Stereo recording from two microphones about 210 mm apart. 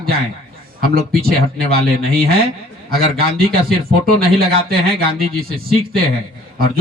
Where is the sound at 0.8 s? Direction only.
45° right (ahead or behind).